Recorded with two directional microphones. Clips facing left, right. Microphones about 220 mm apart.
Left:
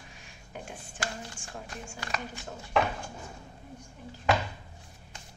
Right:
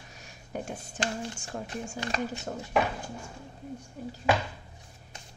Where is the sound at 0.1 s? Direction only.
40° right (ahead or behind).